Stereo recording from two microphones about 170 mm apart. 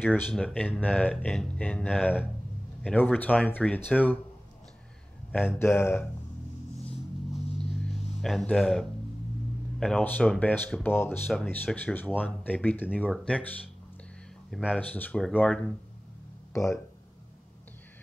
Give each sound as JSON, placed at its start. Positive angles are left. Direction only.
{"t": 0.0, "sound": "speech", "side_deg": 10}
{"t": 5.3, "sound": "speech", "side_deg": 15}
{"t": 7.3, "sound": "music", "side_deg": 40}
{"t": 7.9, "sound": "a sound", "side_deg": 40}
{"t": 8.2, "sound": "speech", "side_deg": 0}
{"t": 14.7, "sound": "speech", "side_deg": 10}